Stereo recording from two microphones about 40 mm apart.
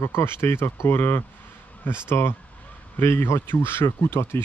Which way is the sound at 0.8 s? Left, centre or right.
Left.